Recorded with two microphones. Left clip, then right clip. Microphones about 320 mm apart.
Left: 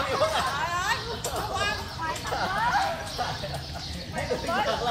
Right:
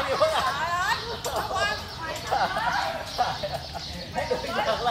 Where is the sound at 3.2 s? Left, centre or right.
Centre.